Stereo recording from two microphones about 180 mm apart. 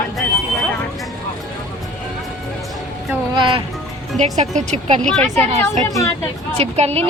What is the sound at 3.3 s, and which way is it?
Music, 25° right (ahead or behind).